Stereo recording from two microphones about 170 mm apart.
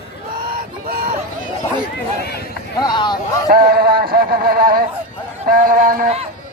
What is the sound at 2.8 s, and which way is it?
Vehicle, 25° left (ahead or behind).